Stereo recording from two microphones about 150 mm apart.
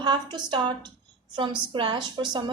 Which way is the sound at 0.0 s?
30° right (ahead or behind).